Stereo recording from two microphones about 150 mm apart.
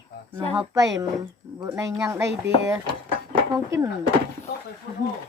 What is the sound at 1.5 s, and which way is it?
Speech, 20° right (ahead or behind).